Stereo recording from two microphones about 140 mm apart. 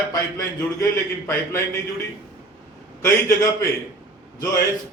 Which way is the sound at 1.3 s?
15° left (ahead or behind).